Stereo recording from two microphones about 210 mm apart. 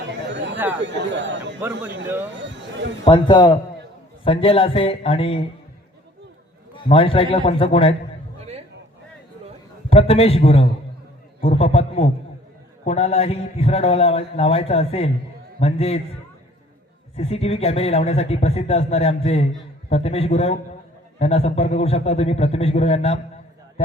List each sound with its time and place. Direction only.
0.1 s chatter: 60° right (ahead or behind)
0.9 s speech: 55° right (ahead or behind)
3.0 s a man's voice: 25° left (ahead or behind)
6.8 s a man's voice: 25° left (ahead or behind)
9.9 s a man's voice: 30° left (ahead or behind)
17.2 s a man's voice: 30° left (ahead or behind)